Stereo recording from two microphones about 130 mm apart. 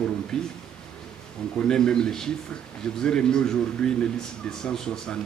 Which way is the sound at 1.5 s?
5° left (ahead or behind).